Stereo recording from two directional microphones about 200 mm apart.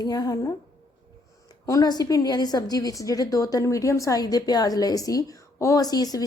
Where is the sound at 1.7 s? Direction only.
20° left (ahead or behind).